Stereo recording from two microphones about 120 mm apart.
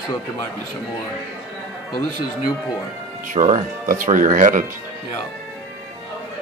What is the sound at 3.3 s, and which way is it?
Speech, 80° right.